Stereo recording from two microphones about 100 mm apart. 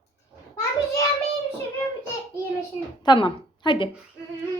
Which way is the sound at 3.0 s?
50° left (ahead or behind).